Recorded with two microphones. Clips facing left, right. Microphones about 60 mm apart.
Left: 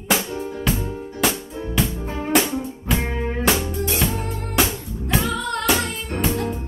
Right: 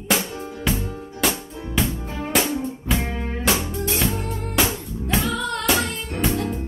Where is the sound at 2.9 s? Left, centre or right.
Left.